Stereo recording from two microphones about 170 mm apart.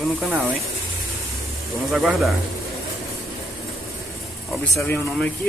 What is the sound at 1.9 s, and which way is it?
Speech, centre (ahead or behind).